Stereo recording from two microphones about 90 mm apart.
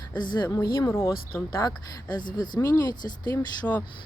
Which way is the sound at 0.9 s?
30° left (ahead or behind).